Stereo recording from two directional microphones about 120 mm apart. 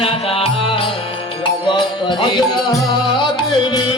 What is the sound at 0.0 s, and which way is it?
Music, 50° left (ahead or behind).